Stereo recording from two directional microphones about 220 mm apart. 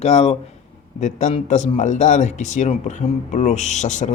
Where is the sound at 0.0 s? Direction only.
30° left (ahead or behind).